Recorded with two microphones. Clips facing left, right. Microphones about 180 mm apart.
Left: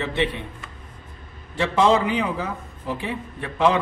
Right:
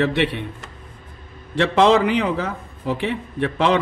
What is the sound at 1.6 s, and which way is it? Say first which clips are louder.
A man's voice: right 3 dB; 70° right (ahead or behind).